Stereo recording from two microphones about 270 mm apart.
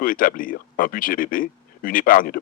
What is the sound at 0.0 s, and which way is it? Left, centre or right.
Speech, left.